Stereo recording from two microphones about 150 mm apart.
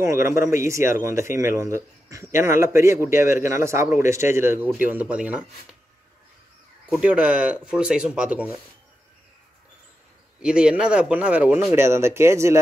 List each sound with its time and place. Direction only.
0.0 s a man's voice: 20° right (ahead or behind)
6.9 s a man's voice: 5° right (ahead or behind)
10.4 s a man's voice: 5° right (ahead or behind)